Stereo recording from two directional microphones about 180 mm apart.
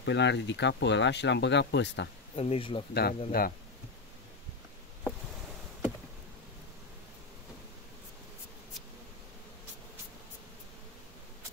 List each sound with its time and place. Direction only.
0.0 s speech: 75° left (ahead or behind)
2.3 s speech: 30° left (ahead or behind)
2.9 s speech: 65° left (ahead or behind)
3.3 s speech: 55° left (ahead or behind)